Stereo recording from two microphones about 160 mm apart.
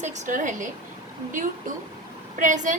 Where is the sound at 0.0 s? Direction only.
55° right (ahead or behind).